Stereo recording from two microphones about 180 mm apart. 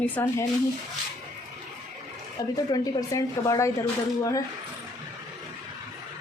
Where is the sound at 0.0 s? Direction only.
10° left (ahead or behind).